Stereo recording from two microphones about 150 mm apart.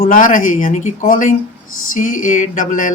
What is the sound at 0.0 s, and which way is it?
Speech, 65° left (ahead or behind).